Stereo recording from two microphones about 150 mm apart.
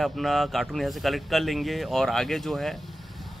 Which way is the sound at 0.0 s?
Centre (ahead or behind).